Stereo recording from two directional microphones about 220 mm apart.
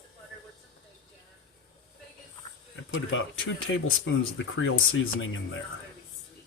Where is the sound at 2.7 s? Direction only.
60° left (ahead or behind).